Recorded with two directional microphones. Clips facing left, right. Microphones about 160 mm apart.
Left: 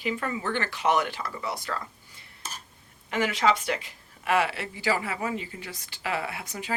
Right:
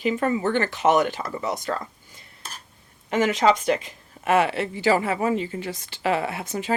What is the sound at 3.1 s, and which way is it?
Speech, 20° right (ahead or behind).